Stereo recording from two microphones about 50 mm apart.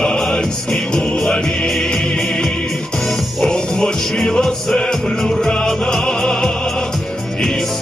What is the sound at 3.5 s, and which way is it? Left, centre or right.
Music, centre.